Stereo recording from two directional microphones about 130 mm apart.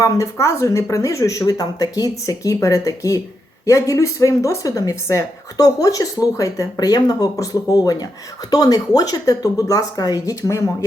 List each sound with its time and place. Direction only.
0.0 s a woman's voice: 25° left (ahead or behind)